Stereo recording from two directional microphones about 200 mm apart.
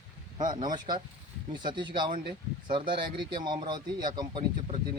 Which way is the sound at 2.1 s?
50° right (ahead or behind).